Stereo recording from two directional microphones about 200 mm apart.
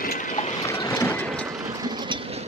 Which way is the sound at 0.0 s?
40° left (ahead or behind).